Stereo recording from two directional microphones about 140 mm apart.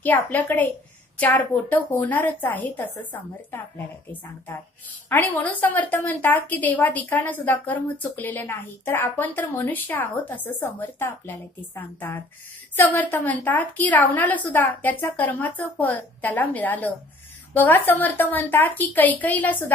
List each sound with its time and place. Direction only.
0.0 s a woman's voice: 10° left (ahead or behind)